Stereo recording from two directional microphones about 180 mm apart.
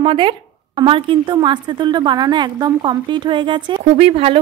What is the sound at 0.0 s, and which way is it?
Speech, 30° right (ahead or behind).